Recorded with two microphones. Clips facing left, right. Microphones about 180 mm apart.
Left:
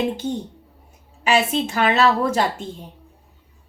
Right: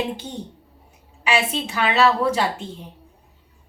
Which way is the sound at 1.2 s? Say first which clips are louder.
Left 3 dB; 45° left (ahead or behind).